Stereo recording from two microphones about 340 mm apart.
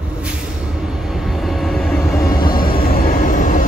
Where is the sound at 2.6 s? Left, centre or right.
Left.